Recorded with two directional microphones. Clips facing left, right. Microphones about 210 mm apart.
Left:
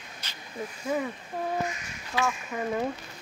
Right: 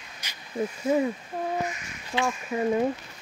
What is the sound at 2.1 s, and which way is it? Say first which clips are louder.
Speech: right 1 dB; 25° right (ahead or behind).